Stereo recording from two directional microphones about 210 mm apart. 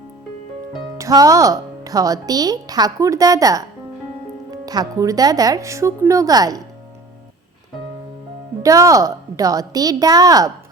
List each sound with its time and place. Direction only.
0.9 s speech: 15° right (ahead or behind)
8.6 s speech: 15° right (ahead or behind)